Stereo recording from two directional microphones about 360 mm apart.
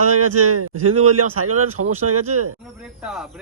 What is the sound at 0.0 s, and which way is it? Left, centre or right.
Speech, right.